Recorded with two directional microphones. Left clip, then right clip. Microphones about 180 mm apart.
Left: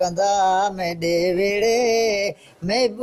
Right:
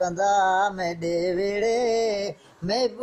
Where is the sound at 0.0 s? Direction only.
30° left (ahead or behind).